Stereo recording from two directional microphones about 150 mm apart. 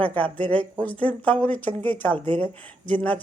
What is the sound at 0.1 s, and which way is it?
A woman's voice, 10° left (ahead or behind).